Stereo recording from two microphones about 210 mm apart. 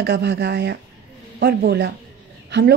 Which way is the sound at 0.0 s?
55° right (ahead or behind).